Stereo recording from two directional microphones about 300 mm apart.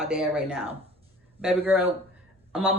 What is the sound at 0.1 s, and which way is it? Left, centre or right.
A woman's voice, centre.